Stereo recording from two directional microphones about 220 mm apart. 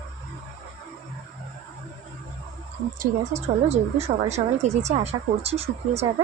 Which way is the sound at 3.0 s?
30° right (ahead or behind).